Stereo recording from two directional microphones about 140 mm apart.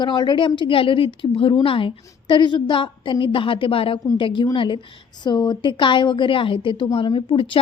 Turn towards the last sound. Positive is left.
turn(degrees=40)  # may be behind; listen again after turning